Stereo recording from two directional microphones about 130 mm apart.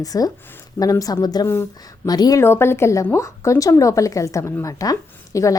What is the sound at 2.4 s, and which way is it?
A woman's voice, 20° left (ahead or behind).